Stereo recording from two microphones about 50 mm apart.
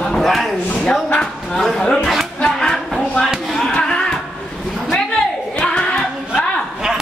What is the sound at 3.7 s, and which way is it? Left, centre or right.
Music, centre.